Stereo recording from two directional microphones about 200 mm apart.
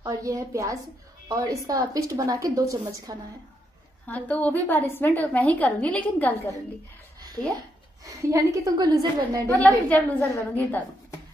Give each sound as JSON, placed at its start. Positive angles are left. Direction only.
{"t": 0.0, "sound": "a woman's voice", "side_deg": -15}
{"t": 4.1, "sound": "a woman's voice", "side_deg": 5}
{"t": 8.0, "sound": "a woman's voice", "side_deg": -15}
{"t": 9.8, "sound": "a woman's voice", "side_deg": 5}